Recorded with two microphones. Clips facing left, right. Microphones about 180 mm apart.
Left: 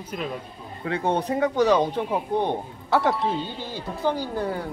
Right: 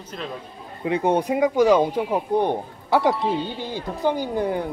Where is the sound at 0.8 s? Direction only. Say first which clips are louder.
Right 4 dB; 15° right (ahead or behind).